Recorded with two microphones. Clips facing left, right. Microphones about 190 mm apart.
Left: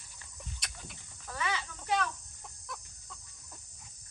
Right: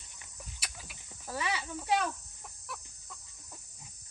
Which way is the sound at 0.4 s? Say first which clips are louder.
Left 1 dB; 5° right (ahead or behind).